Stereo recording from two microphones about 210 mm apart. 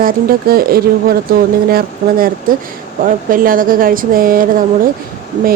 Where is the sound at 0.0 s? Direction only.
45° right (ahead or behind).